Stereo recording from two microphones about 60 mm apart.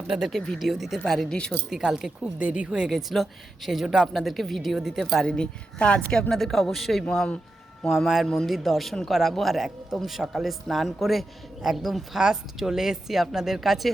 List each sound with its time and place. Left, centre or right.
0.1 s speech: centre
0.7 s speech: centre
1.0 s a woman's voice: centre
1.7 s speech: centre
2.4 s speech: right
2.7 s speech: centre
4.9 s a woman's voice: centre